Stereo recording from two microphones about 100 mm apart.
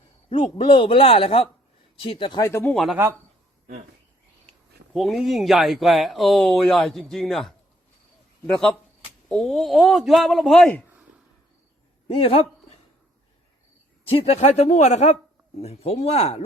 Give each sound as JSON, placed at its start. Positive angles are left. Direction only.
{"t": 0.3, "sound": "a man's voice", "side_deg": 55}
{"t": 2.4, "sound": "speech", "side_deg": 25}
{"t": 2.7, "sound": "speech", "side_deg": 0}
{"t": 4.9, "sound": "speech", "side_deg": 0}
{"t": 12.0, "sound": "a man's voice", "side_deg": 75}
{"t": 14.1, "sound": "speech", "side_deg": 85}